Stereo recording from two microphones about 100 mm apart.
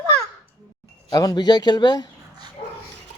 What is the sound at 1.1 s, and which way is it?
Speech, 40° left (ahead or behind).